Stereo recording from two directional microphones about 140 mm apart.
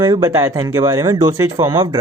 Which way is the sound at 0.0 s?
25° right (ahead or behind).